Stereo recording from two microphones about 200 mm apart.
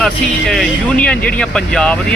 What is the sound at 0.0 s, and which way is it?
Speech, centre (ahead or behind).